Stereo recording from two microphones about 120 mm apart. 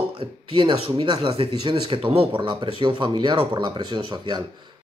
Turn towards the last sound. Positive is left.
turn(degrees=-40)  # may be behind; listen again after turning